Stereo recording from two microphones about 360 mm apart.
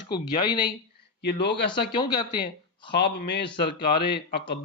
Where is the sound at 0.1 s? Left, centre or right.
Centre.